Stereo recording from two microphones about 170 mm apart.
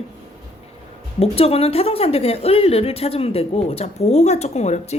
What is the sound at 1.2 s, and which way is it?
Speech, 35° left (ahead or behind).